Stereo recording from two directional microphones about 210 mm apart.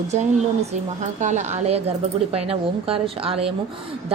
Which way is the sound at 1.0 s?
35° right (ahead or behind).